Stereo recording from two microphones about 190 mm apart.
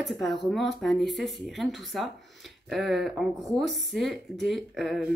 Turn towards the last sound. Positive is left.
turn(degrees=0)  # may be behind; listen again after turning